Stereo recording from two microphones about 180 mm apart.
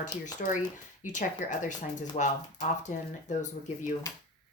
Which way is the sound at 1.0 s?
45° left (ahead or behind).